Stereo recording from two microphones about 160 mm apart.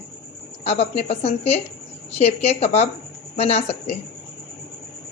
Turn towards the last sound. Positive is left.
turn(degrees=40)  # may be behind; listen again after turning